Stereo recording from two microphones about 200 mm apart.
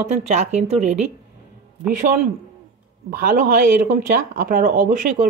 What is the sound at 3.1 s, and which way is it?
Speech, 45° right (ahead or behind).